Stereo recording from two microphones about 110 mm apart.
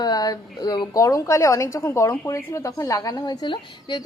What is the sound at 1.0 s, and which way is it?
A woman's voice, 30° left (ahead or behind).